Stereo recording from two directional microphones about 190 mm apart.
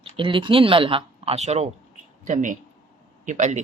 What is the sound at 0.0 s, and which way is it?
Speech, 25° right (ahead or behind).